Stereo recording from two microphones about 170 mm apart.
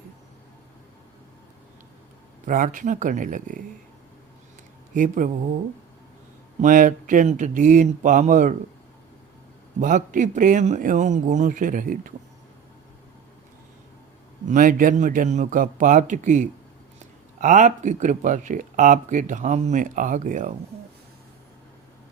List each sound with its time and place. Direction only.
2.5 s speech: 50° right (ahead or behind)
4.9 s speech: 50° right (ahead or behind)
6.6 s speech: 50° right (ahead or behind)
9.8 s speech: 50° right (ahead or behind)
14.4 s speech: 50° right (ahead or behind)